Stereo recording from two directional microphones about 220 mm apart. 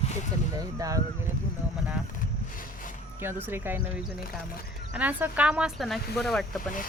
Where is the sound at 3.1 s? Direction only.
10° right (ahead or behind).